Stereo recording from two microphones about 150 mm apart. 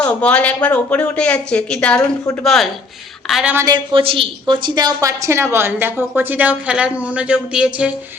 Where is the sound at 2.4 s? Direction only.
5° left (ahead or behind).